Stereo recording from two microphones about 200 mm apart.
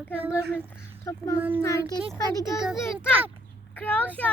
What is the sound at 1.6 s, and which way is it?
Speech, 15° left (ahead or behind).